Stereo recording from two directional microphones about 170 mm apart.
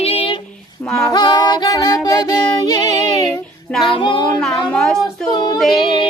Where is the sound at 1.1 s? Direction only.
25° left (ahead or behind).